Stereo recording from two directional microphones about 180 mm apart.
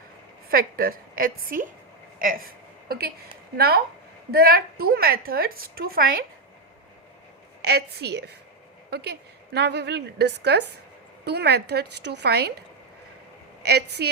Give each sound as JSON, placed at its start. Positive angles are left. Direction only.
{"t": 0.5, "sound": "a woman's voice", "side_deg": -55}
{"t": 2.1, "sound": "a sound", "side_deg": -50}
{"t": 4.3, "sound": "a woman's voice", "side_deg": -55}
{"t": 7.6, "sound": "a woman's voice", "side_deg": -65}
{"t": 13.6, "sound": "a woman's voice", "side_deg": -65}